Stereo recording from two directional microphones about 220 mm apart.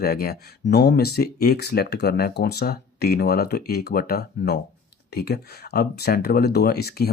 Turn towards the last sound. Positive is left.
turn(degrees=45)  # may be behind; listen again after turning